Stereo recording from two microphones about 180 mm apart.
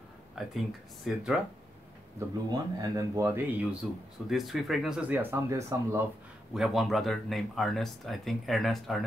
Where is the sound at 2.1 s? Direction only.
20° right (ahead or behind).